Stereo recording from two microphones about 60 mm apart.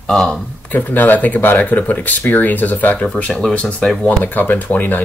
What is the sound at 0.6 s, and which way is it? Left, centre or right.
Speech, left.